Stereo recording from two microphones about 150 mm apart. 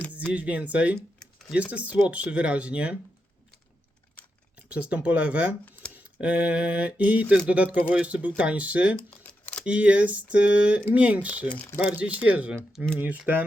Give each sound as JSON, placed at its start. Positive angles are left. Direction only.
{"t": 0.3, "sound": "speech", "side_deg": -10}
{"t": 0.9, "sound": "computer keyboard", "side_deg": 5}
{"t": 1.7, "sound": "speech", "side_deg": -10}
{"t": 4.7, "sound": "speech", "side_deg": -10}
{"t": 5.9, "sound": "a sound", "side_deg": -10}
{"t": 7.4, "sound": "speech", "side_deg": -10}
{"t": 9.0, "sound": "a sound", "side_deg": 5}
{"t": 9.6, "sound": "speech", "side_deg": -10}
{"t": 11.4, "sound": "speech", "side_deg": 10}
{"t": 11.9, "sound": "speech", "side_deg": -10}